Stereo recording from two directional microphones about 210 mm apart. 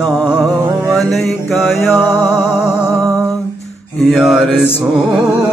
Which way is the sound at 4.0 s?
Centre (ahead or behind).